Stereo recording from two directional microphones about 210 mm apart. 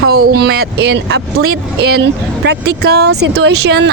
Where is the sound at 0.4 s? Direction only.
55° right (ahead or behind).